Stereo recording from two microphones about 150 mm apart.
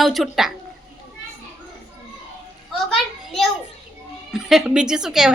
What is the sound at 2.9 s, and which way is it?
A child's voice, centre (ahead or behind).